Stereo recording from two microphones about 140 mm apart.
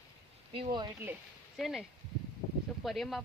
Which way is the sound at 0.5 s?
30° right (ahead or behind).